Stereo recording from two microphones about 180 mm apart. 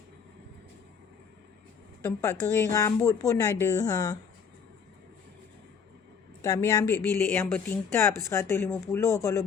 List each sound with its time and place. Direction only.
2.0 s speech: 15° left (ahead or behind)
6.4 s a woman's voice: 20° left (ahead or behind)